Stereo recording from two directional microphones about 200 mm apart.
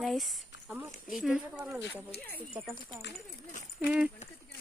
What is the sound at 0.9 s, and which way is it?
Speech, centre (ahead or behind).